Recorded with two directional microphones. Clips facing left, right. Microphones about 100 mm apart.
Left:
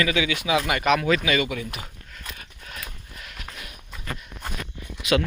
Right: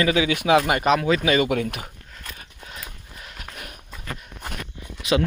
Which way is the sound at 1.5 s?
60° right (ahead or behind).